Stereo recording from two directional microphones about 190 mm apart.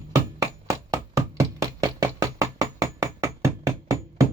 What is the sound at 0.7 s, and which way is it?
Knock, 15° right (ahead or behind).